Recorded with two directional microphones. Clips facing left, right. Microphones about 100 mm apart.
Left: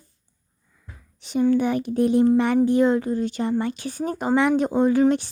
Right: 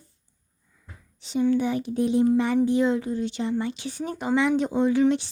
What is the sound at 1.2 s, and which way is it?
Speech, 55° left (ahead or behind).